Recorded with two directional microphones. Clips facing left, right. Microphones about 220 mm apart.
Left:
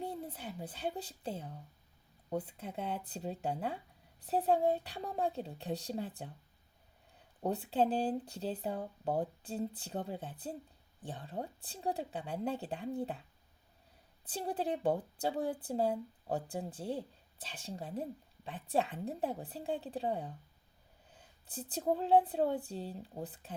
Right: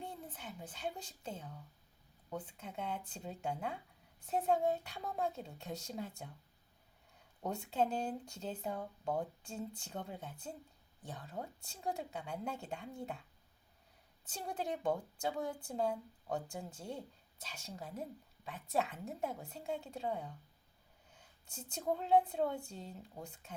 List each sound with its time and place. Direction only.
0.0 s speech: 35° left (ahead or behind)
7.4 s speech: 35° left (ahead or behind)
14.3 s speech: 35° left (ahead or behind)